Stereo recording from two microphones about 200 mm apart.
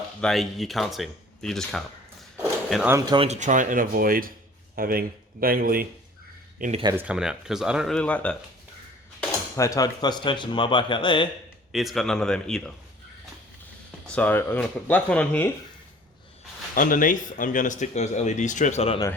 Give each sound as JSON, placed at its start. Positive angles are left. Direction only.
{"t": 0.2, "sound": "speech", "side_deg": 0}
{"t": 2.9, "sound": "speech", "side_deg": -20}
{"t": 3.2, "sound": "speech", "side_deg": -35}
{"t": 6.6, "sound": "speech", "side_deg": -35}
{"t": 6.9, "sound": "speech", "side_deg": -5}
{"t": 9.6, "sound": "speech", "side_deg": 15}
{"t": 11.7, "sound": "speech", "side_deg": 0}
{"t": 14.2, "sound": "speech", "side_deg": 10}
{"t": 16.7, "sound": "speech", "side_deg": 40}